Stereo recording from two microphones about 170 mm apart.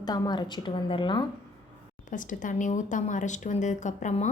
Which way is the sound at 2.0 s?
50° left (ahead or behind).